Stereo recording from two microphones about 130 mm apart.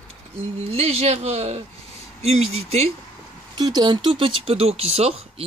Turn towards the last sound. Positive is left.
turn(degrees=-50)  # may be behind; listen again after turning